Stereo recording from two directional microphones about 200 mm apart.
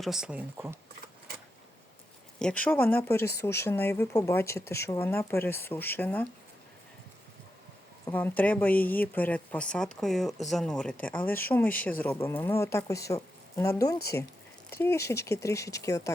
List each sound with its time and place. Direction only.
0.0 s speech: 5° right (ahead or behind)
2.4 s speech: 5° left (ahead or behind)
8.0 s speech: 10° left (ahead or behind)